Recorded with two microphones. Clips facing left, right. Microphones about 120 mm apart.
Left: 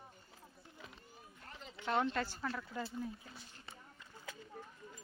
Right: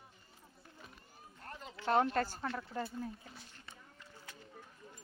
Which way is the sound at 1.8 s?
45° right (ahead or behind).